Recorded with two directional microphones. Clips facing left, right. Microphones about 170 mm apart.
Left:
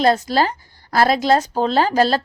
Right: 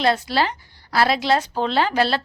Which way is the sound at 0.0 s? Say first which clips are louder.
Left 4 dB; 40° left (ahead or behind).